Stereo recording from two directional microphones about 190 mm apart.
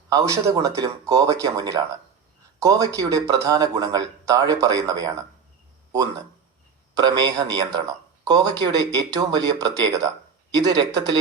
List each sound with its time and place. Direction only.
0.1 s speech: 15° right (ahead or behind)
6.9 s speech: 20° right (ahead or behind)